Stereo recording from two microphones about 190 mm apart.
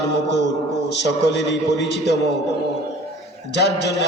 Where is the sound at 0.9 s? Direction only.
65° left (ahead or behind).